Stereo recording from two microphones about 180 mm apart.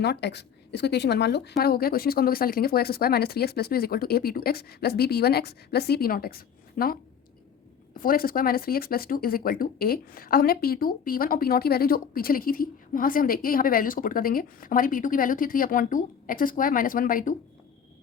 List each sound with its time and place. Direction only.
0.0 s speech: 70° left (ahead or behind); by 17.3 s 50° left (ahead or behind)